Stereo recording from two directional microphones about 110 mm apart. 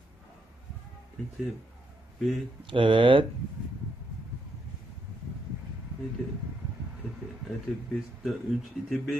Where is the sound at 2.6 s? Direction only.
50° right (ahead or behind).